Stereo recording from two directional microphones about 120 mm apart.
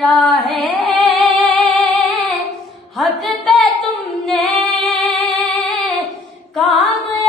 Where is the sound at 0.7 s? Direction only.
40° right (ahead or behind).